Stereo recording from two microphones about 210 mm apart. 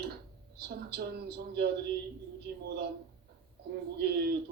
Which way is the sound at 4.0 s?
50° right (ahead or behind).